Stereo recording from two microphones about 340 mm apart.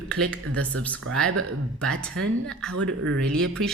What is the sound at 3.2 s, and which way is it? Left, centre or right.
Speech, centre.